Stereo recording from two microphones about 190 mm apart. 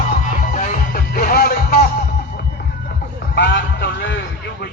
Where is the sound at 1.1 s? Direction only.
55° left (ahead or behind).